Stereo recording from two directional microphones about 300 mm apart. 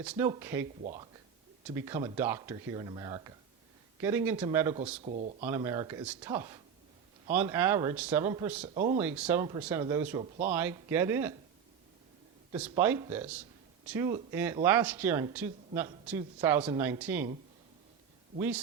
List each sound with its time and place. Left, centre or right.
0.0 s speech: centre
5.0 s speech: right
5.5 s speech: centre
8.6 s speech: right
9.0 s speech: centre
12.5 s speech: centre
18.3 s speech: centre